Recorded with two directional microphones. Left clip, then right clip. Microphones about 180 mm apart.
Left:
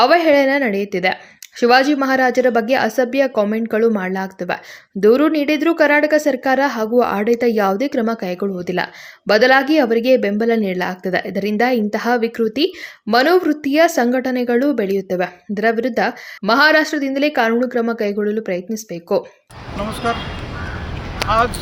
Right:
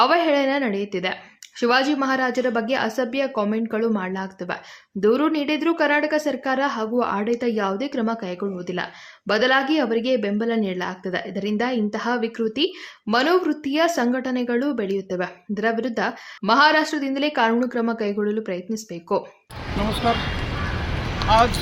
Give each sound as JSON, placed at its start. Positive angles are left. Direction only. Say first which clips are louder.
{"t": 0.0, "sound": "a woman's voice", "louder": "left 6 dB", "side_deg": 20}
{"t": 21.2, "sound": "speech", "louder": "left 1 dB", "side_deg": 10}